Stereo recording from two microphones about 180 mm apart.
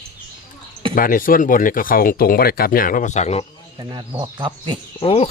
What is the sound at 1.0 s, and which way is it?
Speech, 50° left (ahead or behind).